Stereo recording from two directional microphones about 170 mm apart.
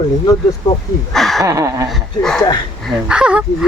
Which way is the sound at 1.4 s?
20° right (ahead or behind).